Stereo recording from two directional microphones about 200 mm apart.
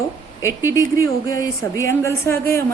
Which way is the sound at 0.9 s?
15° left (ahead or behind).